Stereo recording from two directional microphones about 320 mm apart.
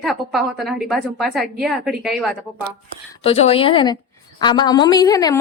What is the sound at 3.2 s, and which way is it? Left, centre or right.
A woman's voice, centre.